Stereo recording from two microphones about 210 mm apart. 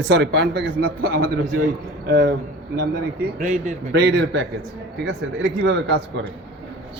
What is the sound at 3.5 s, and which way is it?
Speech, 35° right (ahead or behind).